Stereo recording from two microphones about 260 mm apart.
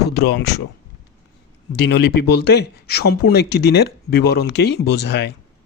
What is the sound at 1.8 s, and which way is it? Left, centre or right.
Speech, left.